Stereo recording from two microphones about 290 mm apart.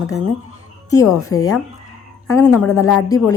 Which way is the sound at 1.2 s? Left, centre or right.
Centre.